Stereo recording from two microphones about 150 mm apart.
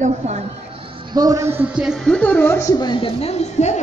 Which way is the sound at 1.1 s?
25° right (ahead or behind).